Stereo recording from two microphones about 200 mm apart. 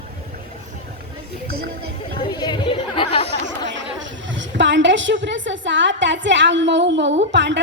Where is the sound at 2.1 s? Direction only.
20° left (ahead or behind).